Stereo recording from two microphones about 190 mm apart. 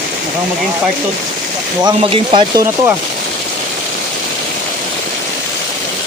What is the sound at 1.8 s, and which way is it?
Speech, 25° right (ahead or behind).